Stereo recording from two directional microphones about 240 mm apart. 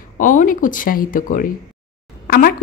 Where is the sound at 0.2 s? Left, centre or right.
Left.